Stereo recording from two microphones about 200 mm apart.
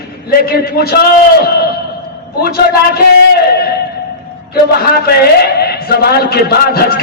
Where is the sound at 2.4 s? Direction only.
50° left (ahead or behind).